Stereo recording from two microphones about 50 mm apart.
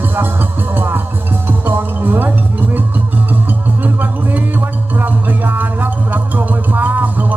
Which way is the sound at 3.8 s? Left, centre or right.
Right.